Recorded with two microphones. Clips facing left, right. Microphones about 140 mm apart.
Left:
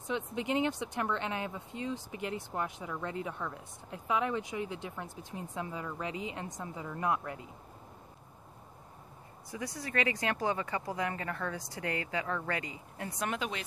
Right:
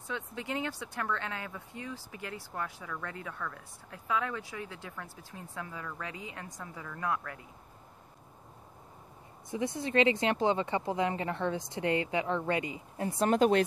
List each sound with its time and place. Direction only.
0.0 s speech: 20° left (ahead or behind)
9.5 s speech: 25° right (ahead or behind); by 13.7 s 45° right (ahead or behind)